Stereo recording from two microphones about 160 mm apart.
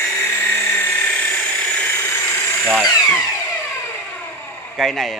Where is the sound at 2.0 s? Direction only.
15° left (ahead or behind).